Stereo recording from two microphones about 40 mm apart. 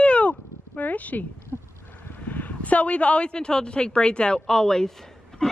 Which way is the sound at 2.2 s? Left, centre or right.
Left.